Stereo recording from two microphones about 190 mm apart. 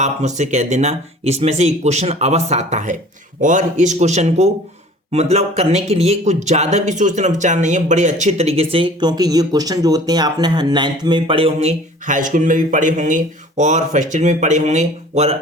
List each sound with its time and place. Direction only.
0.0 s speech: 40° right (ahead or behind)